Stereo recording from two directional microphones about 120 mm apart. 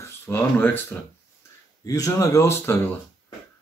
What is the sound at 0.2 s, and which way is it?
Speech, 20° left (ahead or behind).